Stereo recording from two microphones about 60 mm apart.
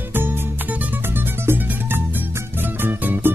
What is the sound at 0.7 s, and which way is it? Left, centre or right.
Music, right.